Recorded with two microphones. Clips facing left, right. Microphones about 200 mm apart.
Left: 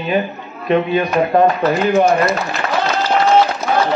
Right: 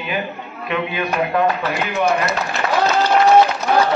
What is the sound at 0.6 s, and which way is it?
A man's voice, 40° left (ahead or behind).